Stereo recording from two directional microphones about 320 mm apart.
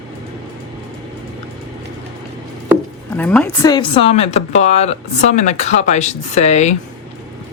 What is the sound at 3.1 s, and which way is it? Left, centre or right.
Speech, centre.